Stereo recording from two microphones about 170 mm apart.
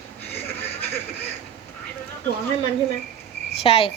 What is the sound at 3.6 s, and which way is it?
Speech, 35° left (ahead or behind).